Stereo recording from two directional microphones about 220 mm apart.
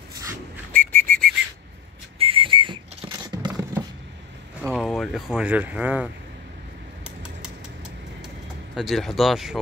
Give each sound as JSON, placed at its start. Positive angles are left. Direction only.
{"t": 0.7, "sound": "whistle", "side_deg": 10}
{"t": 2.1, "sound": "whistle", "side_deg": -25}
{"t": 4.6, "sound": "speech", "side_deg": 0}
{"t": 8.7, "sound": "speech", "side_deg": 0}